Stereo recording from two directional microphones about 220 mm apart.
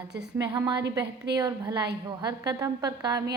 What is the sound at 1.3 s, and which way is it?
Speech, 20° right (ahead or behind).